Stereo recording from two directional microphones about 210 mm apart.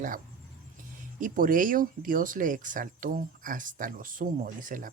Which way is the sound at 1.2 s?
40° right (ahead or behind).